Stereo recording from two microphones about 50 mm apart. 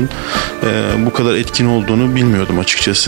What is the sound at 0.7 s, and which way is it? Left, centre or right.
Speech, right.